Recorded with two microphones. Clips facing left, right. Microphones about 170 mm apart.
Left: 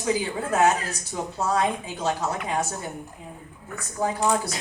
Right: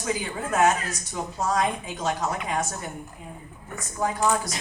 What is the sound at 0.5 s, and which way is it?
A woman's voice, 30° left (ahead or behind).